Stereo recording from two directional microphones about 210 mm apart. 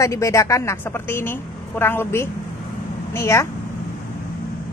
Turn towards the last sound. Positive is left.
turn(degrees=15)  # may be behind; listen again after turning